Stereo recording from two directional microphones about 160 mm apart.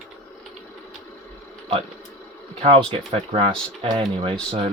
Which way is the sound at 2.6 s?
35° right (ahead or behind).